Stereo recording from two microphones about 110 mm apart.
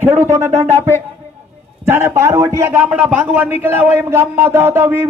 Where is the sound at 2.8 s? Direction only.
10° right (ahead or behind).